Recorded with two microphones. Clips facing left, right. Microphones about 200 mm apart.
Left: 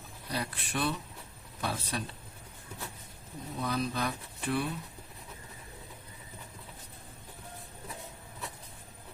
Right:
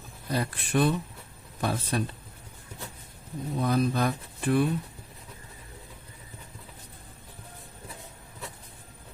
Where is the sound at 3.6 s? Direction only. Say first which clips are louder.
Right 7 dB; 50° right (ahead or behind).